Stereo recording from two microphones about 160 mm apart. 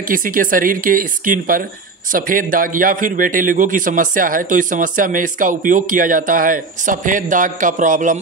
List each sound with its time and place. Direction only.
0.1 s a man's voice: 60° right (ahead or behind)